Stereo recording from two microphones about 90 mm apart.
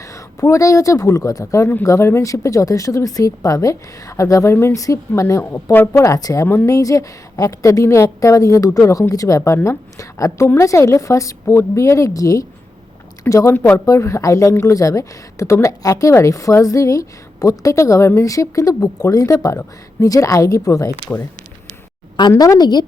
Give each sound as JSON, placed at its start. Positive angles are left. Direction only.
{"t": 0.0, "sound": "a woman's voice", "side_deg": 35}
{"t": 6.4, "sound": "speech", "side_deg": 25}
{"t": 6.7, "sound": "a woman's voice", "side_deg": 40}
{"t": 20.9, "sound": "speech", "side_deg": 25}
{"t": 22.3, "sound": "a woman's voice", "side_deg": 40}